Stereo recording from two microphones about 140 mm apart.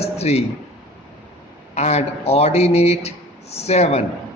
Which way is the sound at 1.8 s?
50° left (ahead or behind).